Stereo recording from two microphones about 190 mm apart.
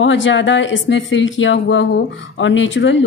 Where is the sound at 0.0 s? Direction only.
80° left.